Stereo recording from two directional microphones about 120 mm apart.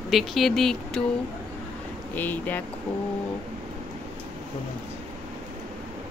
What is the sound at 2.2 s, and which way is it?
Speech, 15° left (ahead or behind).